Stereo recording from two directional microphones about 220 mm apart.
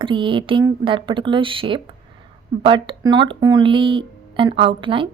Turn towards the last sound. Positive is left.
turn(degrees=-25)  # may be behind; listen again after turning